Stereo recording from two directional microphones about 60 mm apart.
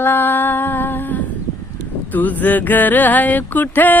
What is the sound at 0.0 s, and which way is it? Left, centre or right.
Humming, left.